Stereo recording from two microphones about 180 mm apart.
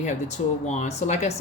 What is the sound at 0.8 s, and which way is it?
Speech, 40° left (ahead or behind).